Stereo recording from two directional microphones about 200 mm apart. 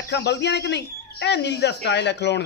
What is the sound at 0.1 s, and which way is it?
Speech, 60° left (ahead or behind).